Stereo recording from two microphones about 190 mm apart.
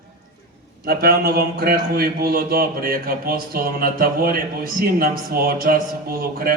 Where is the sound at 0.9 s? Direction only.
55° right (ahead or behind).